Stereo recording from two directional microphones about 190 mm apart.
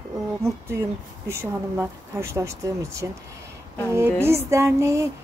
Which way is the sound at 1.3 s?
15° right (ahead or behind).